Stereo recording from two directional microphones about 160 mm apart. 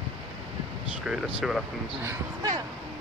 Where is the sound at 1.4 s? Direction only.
Centre (ahead or behind).